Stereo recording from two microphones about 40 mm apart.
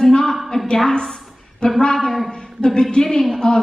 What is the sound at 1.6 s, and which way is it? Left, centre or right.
Speech, left.